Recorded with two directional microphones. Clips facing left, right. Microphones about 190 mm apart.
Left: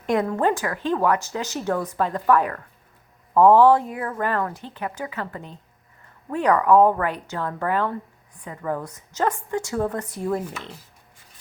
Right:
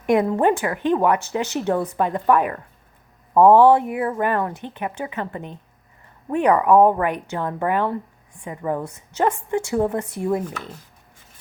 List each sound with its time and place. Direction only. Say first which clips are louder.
0.0 s a woman's voice: right 4 dB; 20° right (ahead or behind)